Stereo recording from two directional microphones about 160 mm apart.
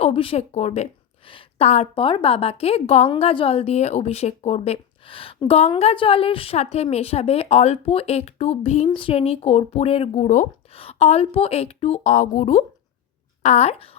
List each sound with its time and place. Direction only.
0.0 s a woman's voice: 35° left (ahead or behind)
10.2 s speech: 50° left (ahead or behind)
10.8 s a woman's voice: 40° left (ahead or behind)